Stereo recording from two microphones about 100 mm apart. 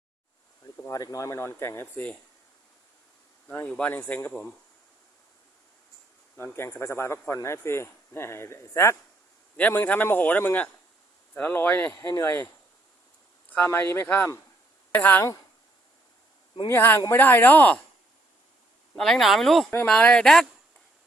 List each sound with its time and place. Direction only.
0.9 s speech: 35° left (ahead or behind)
3.7 s speech: 15° left (ahead or behind)
6.3 s speech: 20° left (ahead or behind)
13.7 s speech: 25° left (ahead or behind)
16.6 s speech: 25° left (ahead or behind)
18.9 s speech: 5° left (ahead or behind)